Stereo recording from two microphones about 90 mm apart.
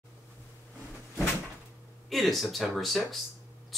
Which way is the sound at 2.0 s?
Centre (ahead or behind).